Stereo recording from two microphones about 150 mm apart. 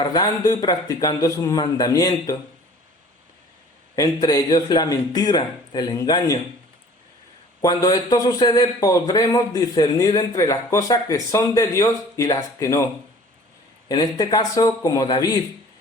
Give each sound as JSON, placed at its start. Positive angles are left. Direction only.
{"t": 0.0, "sound": "a man's voice", "side_deg": 25}
{"t": 3.9, "sound": "a man's voice", "side_deg": 25}
{"t": 7.6, "sound": "a man's voice", "side_deg": 25}
{"t": 13.8, "sound": "a man's voice", "side_deg": 25}